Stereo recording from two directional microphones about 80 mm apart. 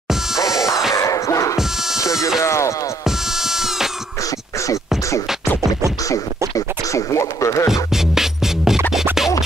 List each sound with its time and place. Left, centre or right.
0.4 s music: left
0.9 s a sound: left
2.4 s music: left
3.3 s music: centre
6.5 s music: left
7.9 s music: centre